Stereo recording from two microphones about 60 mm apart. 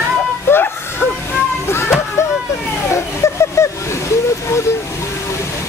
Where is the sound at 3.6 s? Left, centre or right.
Left.